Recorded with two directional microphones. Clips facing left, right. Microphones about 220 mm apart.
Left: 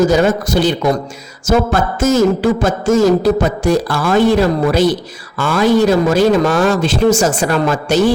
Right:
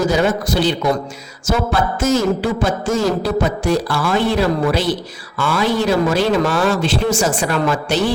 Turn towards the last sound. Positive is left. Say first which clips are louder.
# left 4 dB
turn(degrees=45)  # may be behind; listen again after turning